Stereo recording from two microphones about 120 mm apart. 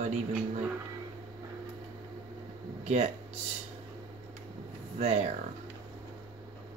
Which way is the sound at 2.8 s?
70° right (ahead or behind).